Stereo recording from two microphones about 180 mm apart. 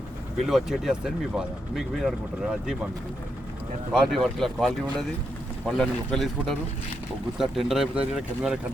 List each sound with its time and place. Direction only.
0.4 s speech: centre (ahead or behind)
3.9 s speech: centre (ahead or behind)